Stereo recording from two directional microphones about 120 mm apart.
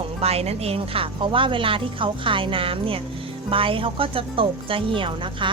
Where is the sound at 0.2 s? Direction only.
60° right (ahead or behind).